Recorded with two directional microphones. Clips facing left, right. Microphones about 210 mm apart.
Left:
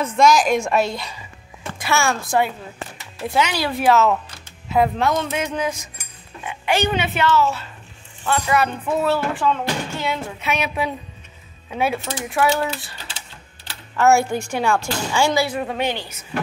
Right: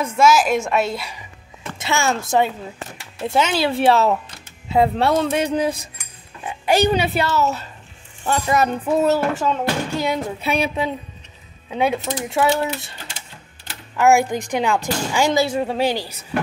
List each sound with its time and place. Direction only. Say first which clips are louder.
0.0 s a woman's voice: even; 5° right (ahead or behind)
1.8 s speech: even; 20° right (ahead or behind)
4.6 s music: right 2 dB; 30° right (ahead or behind)
10.4 s speech: right 1 dB; 30° right (ahead or behind)
13.9 s speech: right 1 dB; 15° right (ahead or behind)
15.7 s music: right 3 dB; 35° right (ahead or behind)